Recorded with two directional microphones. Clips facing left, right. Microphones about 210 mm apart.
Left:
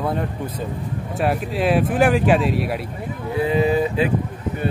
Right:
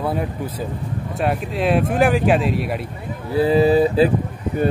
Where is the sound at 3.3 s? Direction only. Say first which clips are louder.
Right 4 dB; 35° right (ahead or behind).